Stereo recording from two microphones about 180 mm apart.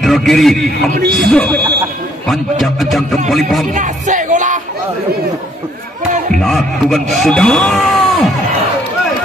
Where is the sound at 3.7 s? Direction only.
45° right (ahead or behind).